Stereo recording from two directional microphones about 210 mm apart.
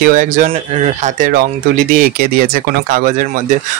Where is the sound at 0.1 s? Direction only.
40° right (ahead or behind).